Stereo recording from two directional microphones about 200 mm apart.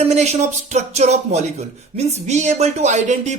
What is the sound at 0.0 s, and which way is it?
Speech, 35° right (ahead or behind).